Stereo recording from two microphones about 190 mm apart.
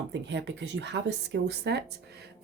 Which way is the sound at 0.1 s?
65° right (ahead or behind).